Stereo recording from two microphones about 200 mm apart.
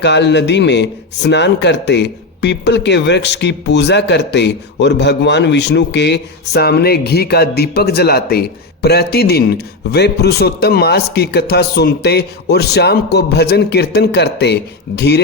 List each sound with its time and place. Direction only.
0.0 s a man's voice: 60° left (ahead or behind)